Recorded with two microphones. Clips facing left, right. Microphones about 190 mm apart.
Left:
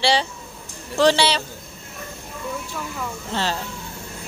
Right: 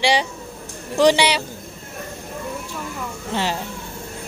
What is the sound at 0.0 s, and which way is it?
A man's voice, 15° right (ahead or behind).